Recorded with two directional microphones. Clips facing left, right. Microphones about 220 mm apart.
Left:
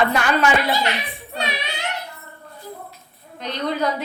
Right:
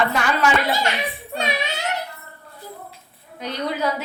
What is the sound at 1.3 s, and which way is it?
Child singing, 45° right (ahead or behind).